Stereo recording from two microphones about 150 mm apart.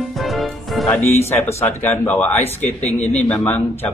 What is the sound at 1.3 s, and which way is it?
Speech, 20° left (ahead or behind).